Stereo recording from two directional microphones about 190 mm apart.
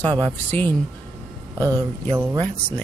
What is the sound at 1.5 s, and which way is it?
Speech, 15° right (ahead or behind).